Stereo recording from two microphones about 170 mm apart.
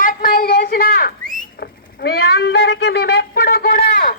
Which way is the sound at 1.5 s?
65° left (ahead or behind).